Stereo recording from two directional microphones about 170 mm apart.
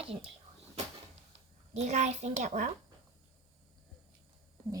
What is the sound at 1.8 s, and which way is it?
Speech, 40° right (ahead or behind).